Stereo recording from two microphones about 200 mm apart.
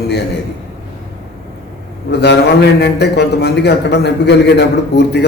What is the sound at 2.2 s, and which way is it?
A man's voice, 55° left (ahead or behind).